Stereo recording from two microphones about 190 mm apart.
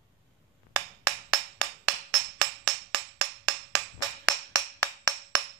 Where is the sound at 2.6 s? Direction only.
20° right (ahead or behind).